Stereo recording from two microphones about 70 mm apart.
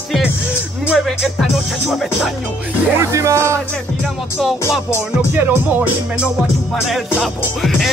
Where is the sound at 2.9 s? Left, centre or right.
Right.